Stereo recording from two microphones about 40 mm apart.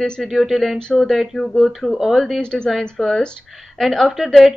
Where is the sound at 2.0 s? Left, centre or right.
Centre.